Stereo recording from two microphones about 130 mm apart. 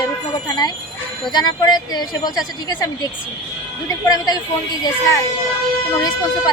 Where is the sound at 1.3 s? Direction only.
30° left (ahead or behind).